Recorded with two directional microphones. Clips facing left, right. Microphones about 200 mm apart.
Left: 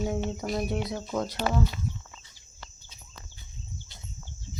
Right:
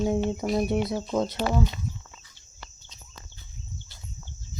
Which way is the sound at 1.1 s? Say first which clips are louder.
Right 1 dB; 25° right (ahead or behind).